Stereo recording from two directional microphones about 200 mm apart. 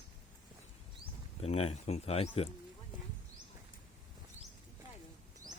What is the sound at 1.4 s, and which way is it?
Speech, 30° left (ahead or behind).